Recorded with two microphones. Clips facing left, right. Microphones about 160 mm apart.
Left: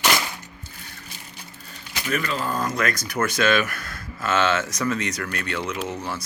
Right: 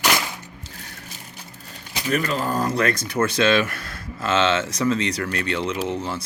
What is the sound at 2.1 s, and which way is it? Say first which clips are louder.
Speech: right 3 dB; 40° right (ahead or behind).